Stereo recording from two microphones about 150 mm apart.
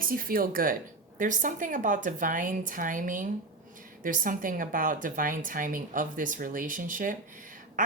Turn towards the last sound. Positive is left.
turn(degrees=-60)  # may be behind; listen again after turning